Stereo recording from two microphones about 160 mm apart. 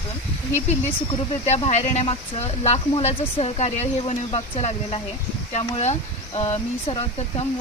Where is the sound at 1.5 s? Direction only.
40° left (ahead or behind).